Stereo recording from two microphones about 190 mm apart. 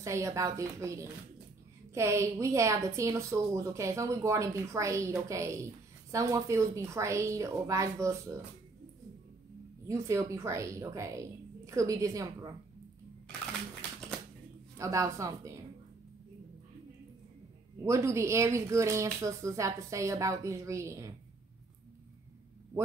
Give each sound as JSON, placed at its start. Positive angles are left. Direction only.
{"t": 0.0, "sound": "a woman's voice", "side_deg": -15}
{"t": 9.8, "sound": "a woman's voice", "side_deg": -15}
{"t": 14.8, "sound": "a woman's voice", "side_deg": -15}
{"t": 17.8, "sound": "a woman's voice", "side_deg": -15}